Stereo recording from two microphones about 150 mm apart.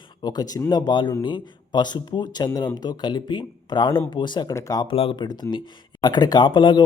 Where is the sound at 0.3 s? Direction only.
25° left (ahead or behind).